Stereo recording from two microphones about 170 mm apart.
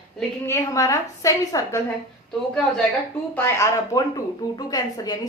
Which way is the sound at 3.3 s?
15° left (ahead or behind).